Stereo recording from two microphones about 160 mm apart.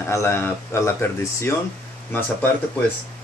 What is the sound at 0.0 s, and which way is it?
Speech, 15° left (ahead or behind).